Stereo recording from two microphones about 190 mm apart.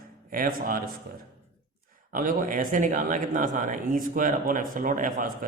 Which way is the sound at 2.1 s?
45° right (ahead or behind).